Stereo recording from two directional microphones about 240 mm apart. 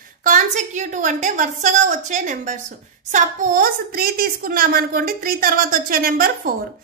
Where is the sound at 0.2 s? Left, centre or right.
Right.